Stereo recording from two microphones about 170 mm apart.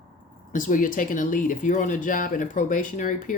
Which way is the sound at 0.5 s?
50° left (ahead or behind).